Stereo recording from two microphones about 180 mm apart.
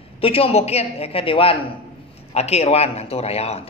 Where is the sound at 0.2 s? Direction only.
30° left (ahead or behind).